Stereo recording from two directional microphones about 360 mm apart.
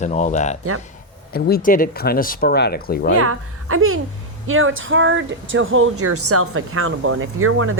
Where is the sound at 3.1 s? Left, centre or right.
Right.